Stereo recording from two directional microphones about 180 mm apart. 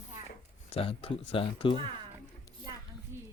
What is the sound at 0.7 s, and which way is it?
Speech, 30° left (ahead or behind).